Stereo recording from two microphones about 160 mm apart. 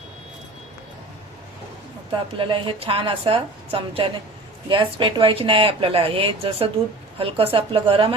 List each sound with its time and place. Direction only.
2.4 s speech: 35° right (ahead or behind)